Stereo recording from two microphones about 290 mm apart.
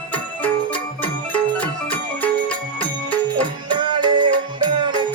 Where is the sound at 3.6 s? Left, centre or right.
Centre.